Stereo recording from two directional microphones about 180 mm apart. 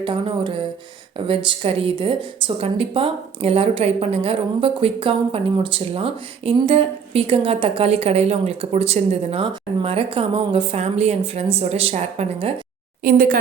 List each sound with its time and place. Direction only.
0.0 s a woman's voice: 25° right (ahead or behind)
13.1 s a woman's voice: 50° right (ahead or behind)